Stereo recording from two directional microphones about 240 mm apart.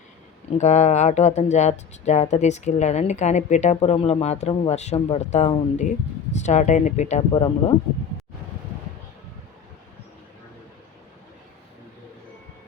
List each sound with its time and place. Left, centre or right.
0.6 s speech: left